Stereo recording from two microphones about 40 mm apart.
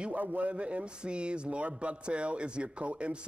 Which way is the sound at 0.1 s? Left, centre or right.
Right.